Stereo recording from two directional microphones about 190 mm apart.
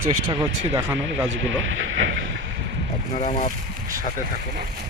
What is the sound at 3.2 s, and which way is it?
Speech, 40° left (ahead or behind).